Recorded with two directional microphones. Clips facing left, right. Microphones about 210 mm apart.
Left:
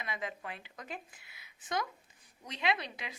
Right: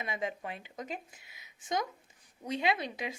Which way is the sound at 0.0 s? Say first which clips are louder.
Right 4 dB; 25° right (ahead or behind).